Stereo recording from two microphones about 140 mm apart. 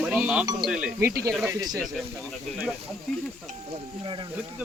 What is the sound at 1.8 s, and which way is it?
Speech, centre (ahead or behind).